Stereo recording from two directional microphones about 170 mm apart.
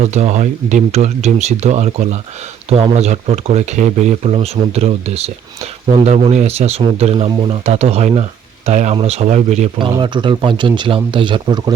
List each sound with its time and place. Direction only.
0.1 s speech: 40° right (ahead or behind)
9.7 s a man's voice: 30° right (ahead or behind)